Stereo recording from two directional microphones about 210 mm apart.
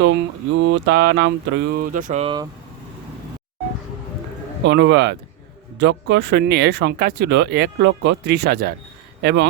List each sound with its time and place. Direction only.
0.0 s mantra: 60° right (ahead or behind); by 2.2 s 40° right (ahead or behind)
2.2 s speech: 20° right (ahead or behind)
4.6 s mantra: 55° right (ahead or behind)
5.8 s speech: 55° right (ahead or behind)